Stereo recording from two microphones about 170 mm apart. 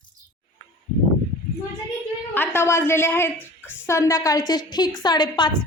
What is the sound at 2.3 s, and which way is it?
A woman's voice, 15° left (ahead or behind).